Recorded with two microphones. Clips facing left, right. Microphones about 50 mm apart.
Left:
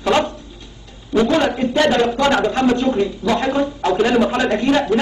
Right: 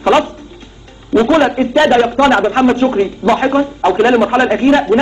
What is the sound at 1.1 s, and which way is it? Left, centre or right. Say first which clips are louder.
A man's voice: right 6 dB; right.